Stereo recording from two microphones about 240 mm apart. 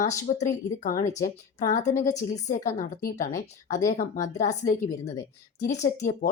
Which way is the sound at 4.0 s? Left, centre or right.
Left.